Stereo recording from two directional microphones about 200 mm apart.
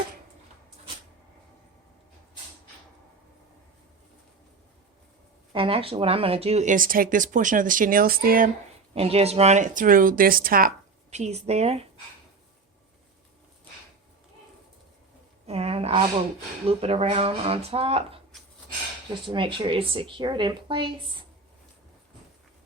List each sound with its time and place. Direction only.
5.5 s speech: 25° right (ahead or behind); by 8.4 s 45° right (ahead or behind)
9.0 s speech: 30° right (ahead or behind); by 10.7 s 45° right (ahead or behind)
11.1 s speech: 35° right (ahead or behind)
15.4 s speech: 30° right (ahead or behind)
19.3 s speech: 25° right (ahead or behind)